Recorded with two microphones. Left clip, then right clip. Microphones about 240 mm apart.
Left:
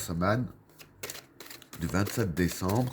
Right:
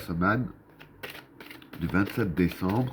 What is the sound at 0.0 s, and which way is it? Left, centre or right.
Speech, left.